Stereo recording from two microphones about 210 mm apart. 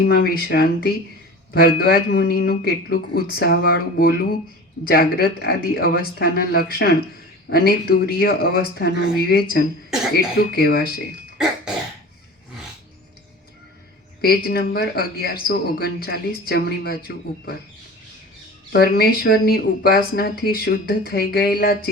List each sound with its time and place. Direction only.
0.1 s speech: 45° left (ahead or behind)
14.2 s speech: 45° left (ahead or behind)
18.7 s speech: 45° left (ahead or behind)